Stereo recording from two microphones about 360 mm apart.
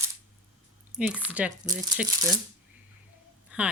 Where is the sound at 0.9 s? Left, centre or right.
Centre.